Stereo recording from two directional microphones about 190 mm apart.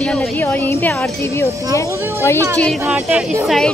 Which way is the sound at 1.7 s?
15° left (ahead or behind).